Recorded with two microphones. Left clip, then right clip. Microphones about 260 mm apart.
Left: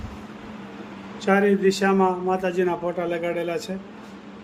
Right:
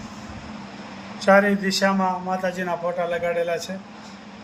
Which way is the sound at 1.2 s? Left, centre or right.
Centre.